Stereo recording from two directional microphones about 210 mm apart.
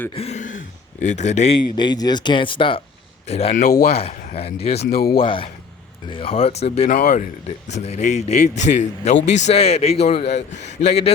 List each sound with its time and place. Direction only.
0.1 s throat clearing: 30° left (ahead or behind)
1.0 s speech: 35° left (ahead or behind)
1.7 s a man's voice: 20° left (ahead or behind)
4.8 s speech: 45° left (ahead or behind)
5.2 s a man's voice: 25° left (ahead or behind)